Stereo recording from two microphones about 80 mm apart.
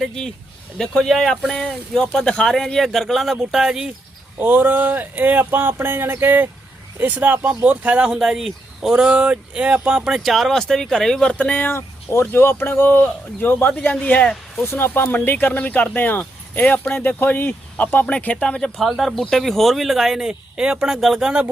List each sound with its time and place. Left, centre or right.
0.0 s speech: centre
4.4 s speech: right; by 11.7 s centre
12.3 s speech: left
14.6 s speech: left; by 21.3 s centre